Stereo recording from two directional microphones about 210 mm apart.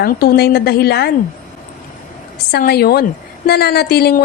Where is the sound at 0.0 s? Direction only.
45° left (ahead or behind).